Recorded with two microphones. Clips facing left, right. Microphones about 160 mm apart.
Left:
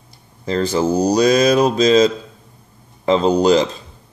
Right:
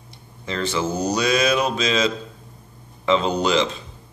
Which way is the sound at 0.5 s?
40° left (ahead or behind).